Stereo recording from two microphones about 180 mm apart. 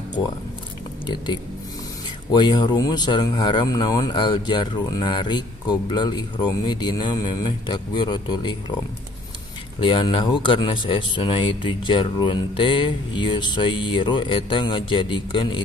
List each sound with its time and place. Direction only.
1.0 s speech: 25° left (ahead or behind)
9.8 s speech: 25° left (ahead or behind)